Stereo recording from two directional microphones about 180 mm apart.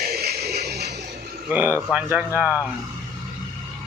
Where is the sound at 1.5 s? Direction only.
10° right (ahead or behind).